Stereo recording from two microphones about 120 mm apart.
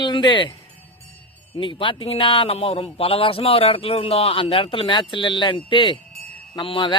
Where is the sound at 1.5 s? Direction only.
45° left (ahead or behind).